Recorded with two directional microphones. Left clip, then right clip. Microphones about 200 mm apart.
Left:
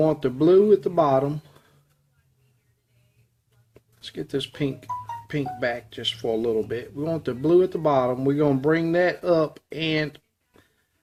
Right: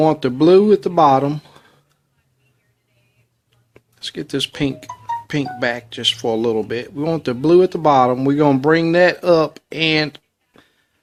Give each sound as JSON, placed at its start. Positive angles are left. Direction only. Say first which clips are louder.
{"t": 0.0, "sound": "speech", "louder": "right 6 dB", "side_deg": -45}
{"t": 3.8, "sound": "speech", "louder": "right 7 dB", "side_deg": -45}